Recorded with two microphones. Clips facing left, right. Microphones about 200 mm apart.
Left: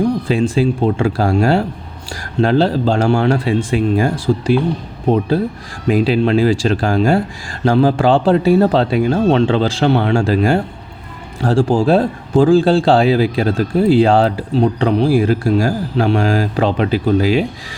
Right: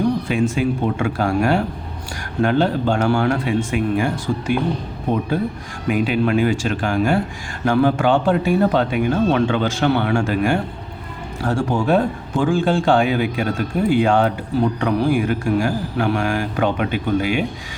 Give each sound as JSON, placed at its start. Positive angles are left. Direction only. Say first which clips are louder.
{"t": 0.3, "sound": "speech", "louder": "left 4 dB", "side_deg": 30}